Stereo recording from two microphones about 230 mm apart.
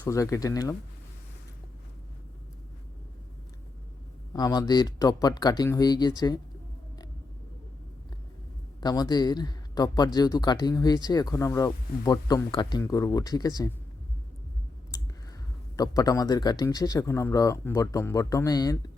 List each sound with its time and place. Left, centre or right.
0.0 s speech: centre
4.4 s speech: centre
8.8 s speech: centre
14.9 s speech: centre